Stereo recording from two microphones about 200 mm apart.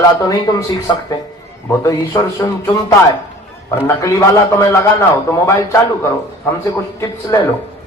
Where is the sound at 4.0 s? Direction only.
15° left (ahead or behind).